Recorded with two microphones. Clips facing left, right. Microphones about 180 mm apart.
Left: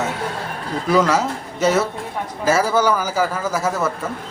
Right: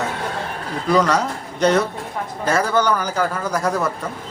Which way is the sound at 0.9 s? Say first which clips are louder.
Left 1 dB; 5° left (ahead or behind).